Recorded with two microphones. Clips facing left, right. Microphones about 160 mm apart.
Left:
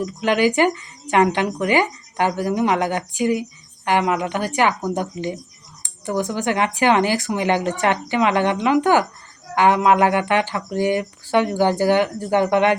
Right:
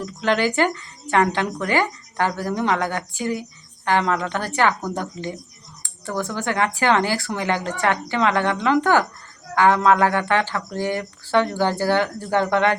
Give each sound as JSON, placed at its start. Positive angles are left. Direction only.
{"t": 0.0, "sound": "speech", "side_deg": 15}